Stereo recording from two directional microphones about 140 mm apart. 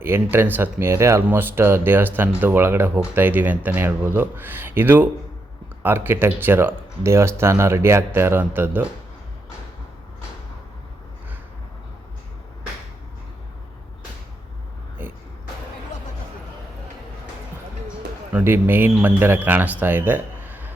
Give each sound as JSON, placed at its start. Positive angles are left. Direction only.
{"t": 0.0, "sound": "speech", "side_deg": -15}
{"t": 18.3, "sound": "speech", "side_deg": -15}